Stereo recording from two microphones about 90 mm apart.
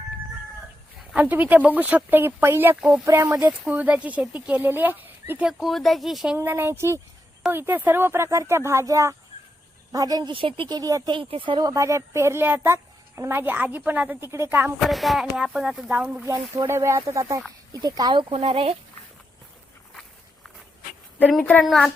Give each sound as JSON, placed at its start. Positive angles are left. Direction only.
{"t": 1.1, "sound": "a woman's voice", "side_deg": -20}
{"t": 3.6, "sound": "speech", "side_deg": -15}
{"t": 5.5, "sound": "speech", "side_deg": 0}
{"t": 6.3, "sound": "a woman's voice", "side_deg": -25}
{"t": 10.3, "sound": "speech", "side_deg": -80}
{"t": 10.7, "sound": "speech", "side_deg": -45}
{"t": 11.1, "sound": "speech", "side_deg": -75}
{"t": 11.6, "sound": "a woman's voice", "side_deg": -35}
{"t": 14.3, "sound": "speech", "side_deg": -30}
{"t": 14.8, "sound": "speech", "side_deg": 0}
{"t": 16.2, "sound": "speech", "side_deg": -35}
{"t": 17.7, "sound": "speech", "side_deg": -45}
{"t": 18.1, "sound": "speech", "side_deg": -75}
{"t": 21.6, "sound": "speech", "side_deg": 0}